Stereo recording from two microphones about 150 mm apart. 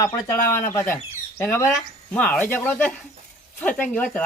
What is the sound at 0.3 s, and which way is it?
Speech, 20° left (ahead or behind).